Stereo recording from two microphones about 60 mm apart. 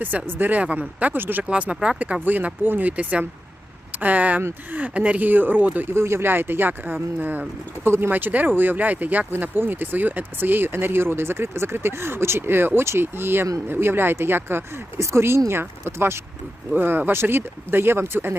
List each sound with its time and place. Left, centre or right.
0.3 s speech: right
1.5 s speech: centre
5.9 s speech: right
7.9 s speech: right
8.1 s speech: right
14.9 s speech: right
16.7 s speech: right